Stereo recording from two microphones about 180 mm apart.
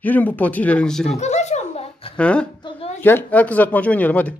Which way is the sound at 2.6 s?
30° left (ahead or behind).